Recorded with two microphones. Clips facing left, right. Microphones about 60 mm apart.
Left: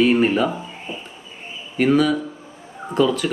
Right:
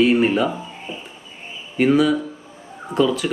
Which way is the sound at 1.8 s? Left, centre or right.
Centre.